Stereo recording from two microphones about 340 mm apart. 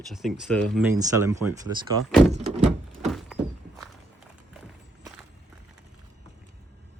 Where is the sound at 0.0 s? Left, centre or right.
Centre.